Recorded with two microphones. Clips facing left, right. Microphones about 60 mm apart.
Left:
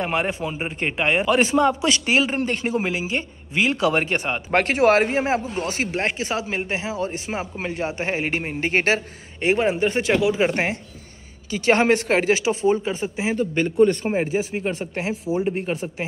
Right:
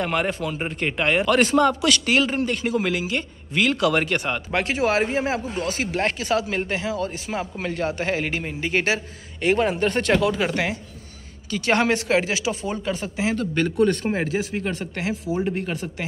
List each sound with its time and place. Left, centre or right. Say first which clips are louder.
0.0 s a man's voice: even; left
2.3 s a man's voice: even; left
4.5 s speech: left 6 dB; left
5.2 s a man's voice: left 2 dB; left
9.5 s speech: left 1 dB; centre
10.5 s speech: left 1 dB; left
12.6 s a man's voice: left 6 dB; left